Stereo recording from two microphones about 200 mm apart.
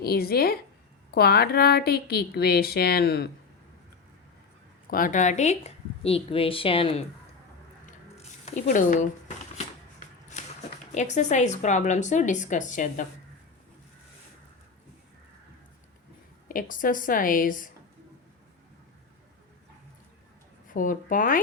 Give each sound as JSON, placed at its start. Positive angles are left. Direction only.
{"t": 0.0, "sound": "a woman's voice", "side_deg": 50}
{"t": 4.9, "sound": "a woman's voice", "side_deg": 45}
{"t": 8.2, "sound": "speech", "side_deg": 35}
{"t": 10.9, "sound": "a woman's voice", "side_deg": 35}
{"t": 16.5, "sound": "a woman's voice", "side_deg": 40}
{"t": 20.7, "sound": "a woman's voice", "side_deg": 40}